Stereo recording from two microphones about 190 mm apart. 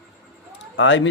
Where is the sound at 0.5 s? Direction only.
70° left (ahead or behind).